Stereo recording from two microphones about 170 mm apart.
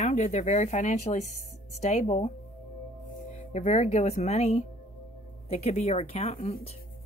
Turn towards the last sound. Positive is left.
turn(degrees=35)  # may be behind; listen again after turning